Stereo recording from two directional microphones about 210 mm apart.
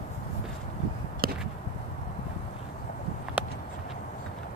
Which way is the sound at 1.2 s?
45° right (ahead or behind).